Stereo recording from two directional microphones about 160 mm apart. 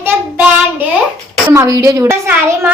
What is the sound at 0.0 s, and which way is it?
Child singing, 10° right (ahead or behind).